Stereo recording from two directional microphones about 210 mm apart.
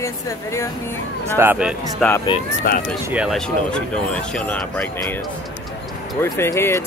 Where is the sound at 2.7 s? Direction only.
45° left (ahead or behind).